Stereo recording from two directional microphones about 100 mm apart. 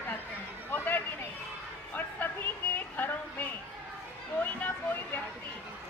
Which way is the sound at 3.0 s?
15° left (ahead or behind).